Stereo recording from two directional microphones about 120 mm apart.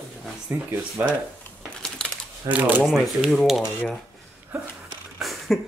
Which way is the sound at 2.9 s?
Centre (ahead or behind).